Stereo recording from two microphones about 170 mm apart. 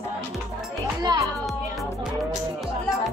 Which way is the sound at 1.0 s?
20° right (ahead or behind).